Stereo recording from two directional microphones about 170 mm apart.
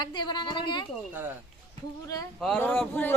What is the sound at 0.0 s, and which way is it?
Speech, 25° left (ahead or behind).